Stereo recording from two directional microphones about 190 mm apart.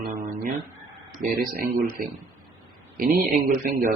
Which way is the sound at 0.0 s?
45° right (ahead or behind).